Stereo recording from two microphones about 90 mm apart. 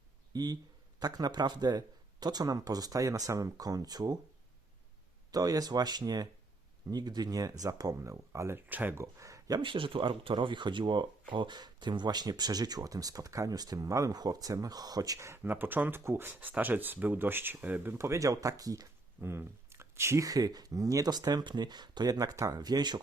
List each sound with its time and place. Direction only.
0.3 s speech: 45° right (ahead or behind)
5.3 s speech: 45° right (ahead or behind)
7.9 s speech: 30° right (ahead or behind)
9.6 s speech: 75° right (ahead or behind); by 17.9 s 20° right (ahead or behind)
17.9 s speech: 30° right (ahead or behind); by 23.0 s 50° right (ahead or behind)